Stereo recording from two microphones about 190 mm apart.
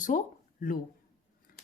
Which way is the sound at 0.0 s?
45° left (ahead or behind).